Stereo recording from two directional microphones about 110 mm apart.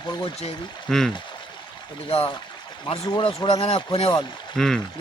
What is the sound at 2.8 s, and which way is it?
Speech, 50° left (ahead or behind).